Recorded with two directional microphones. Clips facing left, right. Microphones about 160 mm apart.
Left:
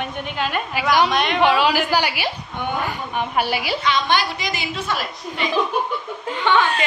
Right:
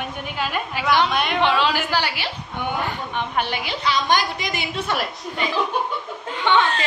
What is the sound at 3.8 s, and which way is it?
Speech, 35° right (ahead or behind).